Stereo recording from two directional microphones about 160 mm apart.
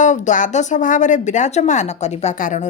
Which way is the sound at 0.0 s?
50° left (ahead or behind).